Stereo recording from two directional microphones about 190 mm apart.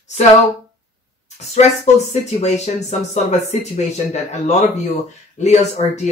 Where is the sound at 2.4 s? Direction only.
35° left (ahead or behind).